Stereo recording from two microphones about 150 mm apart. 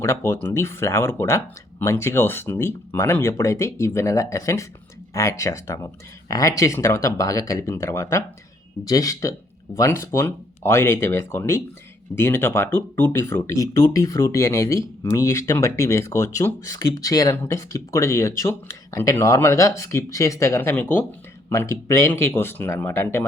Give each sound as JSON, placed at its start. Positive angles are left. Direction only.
{"t": 0.0, "sound": "speech", "side_deg": 15}